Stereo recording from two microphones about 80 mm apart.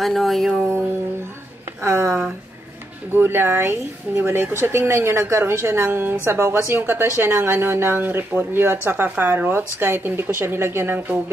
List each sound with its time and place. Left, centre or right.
0.0 s speech: centre
1.8 s a sound: right
3.1 s speech: right